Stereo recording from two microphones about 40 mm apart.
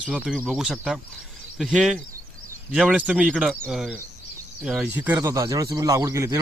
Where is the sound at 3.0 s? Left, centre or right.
Right.